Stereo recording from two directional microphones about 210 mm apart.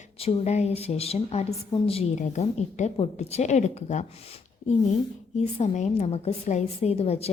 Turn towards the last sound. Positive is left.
turn(degrees=30)  # may be behind; listen again after turning